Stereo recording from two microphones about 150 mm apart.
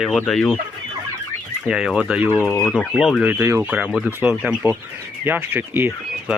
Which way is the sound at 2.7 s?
Centre (ahead or behind).